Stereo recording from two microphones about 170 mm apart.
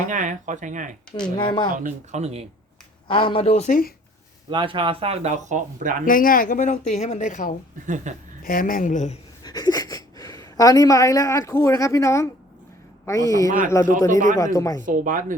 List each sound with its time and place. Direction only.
0.1 s speech: 50° right (ahead or behind)
1.4 s a man's voice: 25° left (ahead or behind)
1.7 s speech: 45° right (ahead or behind)
3.1 s speech: 30° left (ahead or behind); by 3.9 s 50° left (ahead or behind)
4.4 s speech: 30° right (ahead or behind); by 5.9 s 45° right (ahead or behind)
6.1 s speech: 55° left (ahead or behind)
7.9 s speech: 50° right (ahead or behind)
8.4 s speech: 55° left (ahead or behind)
9.4 s a man's voice: 25° left (ahead or behind)
14.1 s speech: 50° right (ahead or behind)
14.3 s a man's voice: 20° left (ahead or behind)
14.8 s speech: 50° right (ahead or behind)